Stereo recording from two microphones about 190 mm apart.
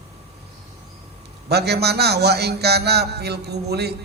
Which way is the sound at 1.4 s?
60° right (ahead or behind).